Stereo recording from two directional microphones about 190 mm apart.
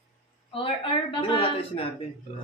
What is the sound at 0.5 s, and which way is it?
A woman's voice, 30° left (ahead or behind).